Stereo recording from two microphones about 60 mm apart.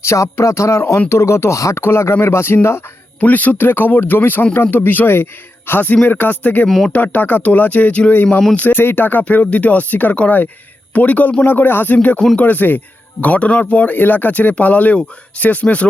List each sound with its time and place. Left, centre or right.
0.0 s speech: left
1.7 s a man's voice: left
3.2 s a man's voice: left
6.7 s speech: centre
6.9 s speech: left